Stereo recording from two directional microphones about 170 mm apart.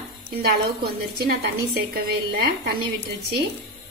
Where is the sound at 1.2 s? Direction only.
75° right (ahead or behind).